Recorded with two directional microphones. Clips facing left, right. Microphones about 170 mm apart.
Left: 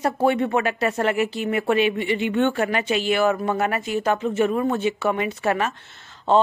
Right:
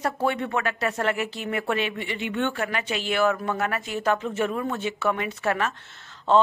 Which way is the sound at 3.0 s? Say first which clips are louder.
Left 1 dB; 15° left (ahead or behind).